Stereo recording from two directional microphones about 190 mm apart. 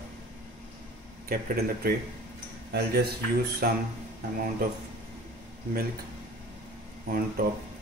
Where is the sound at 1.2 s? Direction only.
55° right (ahead or behind).